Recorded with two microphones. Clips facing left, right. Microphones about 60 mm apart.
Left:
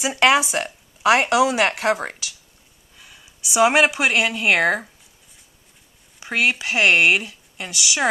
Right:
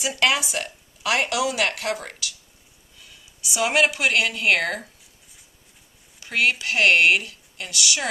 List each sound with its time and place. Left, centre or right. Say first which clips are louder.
0.0 s speech: left 5 dB; left
6.1 s speech: left 1 dB; centre